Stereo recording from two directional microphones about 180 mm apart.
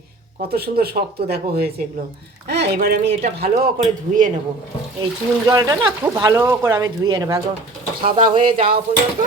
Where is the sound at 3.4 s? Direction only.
50° right (ahead or behind).